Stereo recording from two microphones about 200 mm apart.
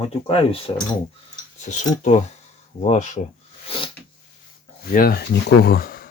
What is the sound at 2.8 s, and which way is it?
Speech, 35° left (ahead or behind).